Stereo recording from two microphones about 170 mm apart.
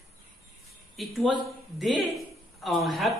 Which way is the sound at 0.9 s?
Centre (ahead or behind).